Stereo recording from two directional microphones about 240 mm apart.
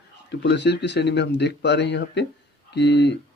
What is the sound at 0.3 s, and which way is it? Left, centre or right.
A man's voice, left.